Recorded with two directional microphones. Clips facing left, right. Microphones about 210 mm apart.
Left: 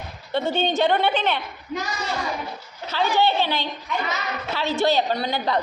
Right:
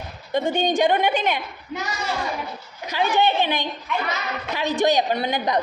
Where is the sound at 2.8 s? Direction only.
15° right (ahead or behind).